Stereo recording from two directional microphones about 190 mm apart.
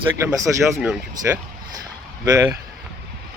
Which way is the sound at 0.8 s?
5° right (ahead or behind).